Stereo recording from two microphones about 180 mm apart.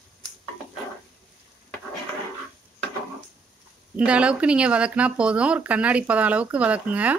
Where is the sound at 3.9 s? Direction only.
5° right (ahead or behind).